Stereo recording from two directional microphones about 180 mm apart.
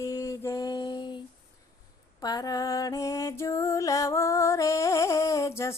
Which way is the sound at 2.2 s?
20° left (ahead or behind).